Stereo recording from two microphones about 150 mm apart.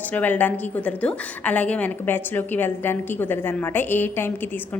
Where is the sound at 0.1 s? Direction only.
10° left (ahead or behind).